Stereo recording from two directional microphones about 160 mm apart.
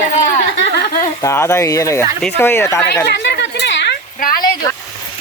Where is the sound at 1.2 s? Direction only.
15° left (ahead or behind).